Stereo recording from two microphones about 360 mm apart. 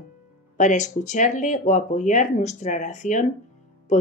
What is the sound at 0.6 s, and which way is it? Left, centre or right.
Speech, centre.